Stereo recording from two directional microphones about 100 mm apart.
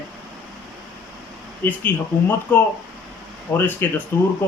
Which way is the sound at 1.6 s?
15° left (ahead or behind).